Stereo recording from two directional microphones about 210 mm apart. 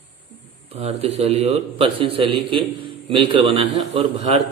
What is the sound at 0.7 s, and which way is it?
A man's voice, 30° right (ahead or behind).